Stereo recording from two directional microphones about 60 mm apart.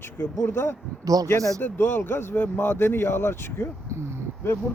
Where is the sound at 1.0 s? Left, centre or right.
Right.